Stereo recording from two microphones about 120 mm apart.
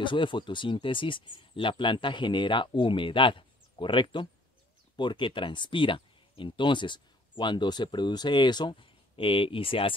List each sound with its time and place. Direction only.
0.0 s speech: 45° left (ahead or behind)